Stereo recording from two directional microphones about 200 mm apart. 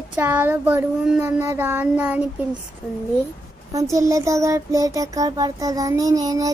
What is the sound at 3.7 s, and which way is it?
Child singing, 15° right (ahead or behind).